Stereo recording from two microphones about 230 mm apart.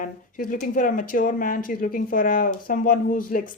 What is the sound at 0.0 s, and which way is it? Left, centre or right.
Speech, left.